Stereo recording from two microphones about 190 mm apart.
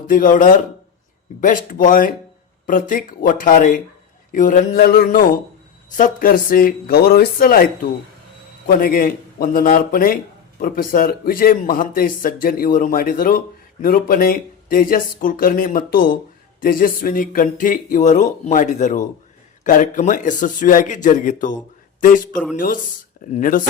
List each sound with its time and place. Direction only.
0.1 s a man's voice: 45° left (ahead or behind)
22.3 s speech: 5° left (ahead or behind)
22.5 s a man's voice: 45° left (ahead or behind)